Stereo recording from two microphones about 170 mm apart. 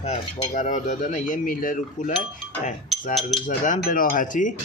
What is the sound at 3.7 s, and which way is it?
Speech, 55° left (ahead or behind).